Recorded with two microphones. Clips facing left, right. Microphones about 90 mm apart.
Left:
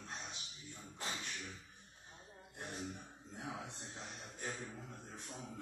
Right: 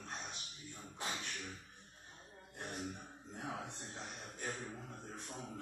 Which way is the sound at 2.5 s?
55° right (ahead or behind).